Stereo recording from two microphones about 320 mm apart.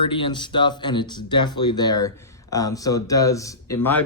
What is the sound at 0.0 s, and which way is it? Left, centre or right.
Speech, centre.